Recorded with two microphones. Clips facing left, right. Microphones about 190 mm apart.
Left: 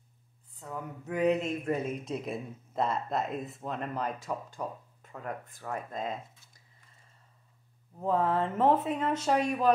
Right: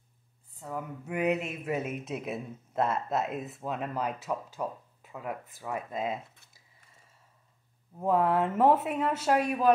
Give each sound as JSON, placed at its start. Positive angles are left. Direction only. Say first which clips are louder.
{"t": 0.6, "sound": "speech", "louder": "right 2 dB", "side_deg": -10}
{"t": 6.2, "sound": "a sound", "louder": "left 1 dB", "side_deg": -60}
{"t": 8.0, "sound": "speech", "louder": "right 2 dB", "side_deg": -10}